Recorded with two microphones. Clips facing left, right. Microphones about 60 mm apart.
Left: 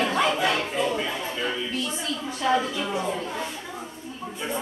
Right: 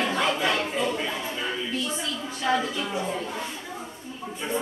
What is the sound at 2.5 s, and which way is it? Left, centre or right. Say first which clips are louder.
Speech: left 2 dB; centre.